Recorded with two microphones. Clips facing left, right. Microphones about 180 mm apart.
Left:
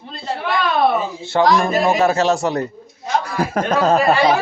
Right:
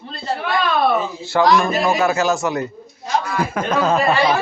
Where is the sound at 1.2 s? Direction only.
25° left (ahead or behind).